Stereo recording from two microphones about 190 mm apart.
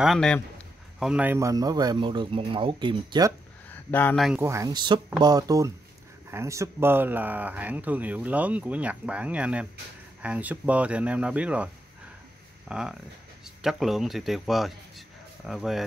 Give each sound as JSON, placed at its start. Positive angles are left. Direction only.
{"t": 0.0, "sound": "a man's voice", "side_deg": 0}
{"t": 3.9, "sound": "speech", "side_deg": 5}
{"t": 4.4, "sound": "a man's voice", "side_deg": -15}